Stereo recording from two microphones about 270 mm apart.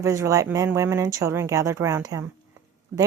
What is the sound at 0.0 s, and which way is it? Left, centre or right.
Speech, centre.